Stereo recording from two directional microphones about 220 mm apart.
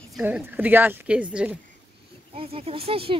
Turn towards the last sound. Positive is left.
turn(degrees=-25)  # may be behind; listen again after turning